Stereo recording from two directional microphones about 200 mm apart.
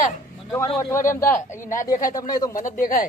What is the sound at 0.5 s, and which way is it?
Speech, 15° left (ahead or behind).